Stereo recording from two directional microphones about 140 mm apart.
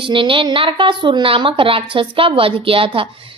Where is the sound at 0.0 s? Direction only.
35° right (ahead or behind).